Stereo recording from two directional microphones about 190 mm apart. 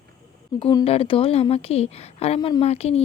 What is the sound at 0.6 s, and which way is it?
A woman's voice, 25° left (ahead or behind).